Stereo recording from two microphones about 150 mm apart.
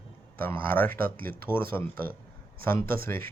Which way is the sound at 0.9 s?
75° right (ahead or behind).